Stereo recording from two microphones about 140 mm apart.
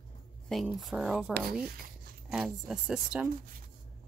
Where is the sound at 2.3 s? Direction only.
5° right (ahead or behind).